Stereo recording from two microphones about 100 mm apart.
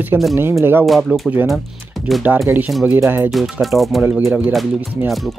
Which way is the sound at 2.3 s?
15° right (ahead or behind).